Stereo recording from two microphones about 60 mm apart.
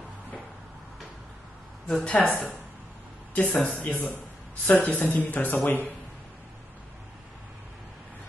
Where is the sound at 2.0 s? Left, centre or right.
Left.